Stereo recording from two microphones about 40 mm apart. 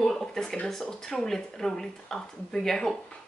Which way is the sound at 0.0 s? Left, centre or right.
Centre.